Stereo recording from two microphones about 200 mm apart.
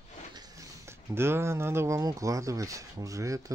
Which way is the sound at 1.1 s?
10° right (ahead or behind).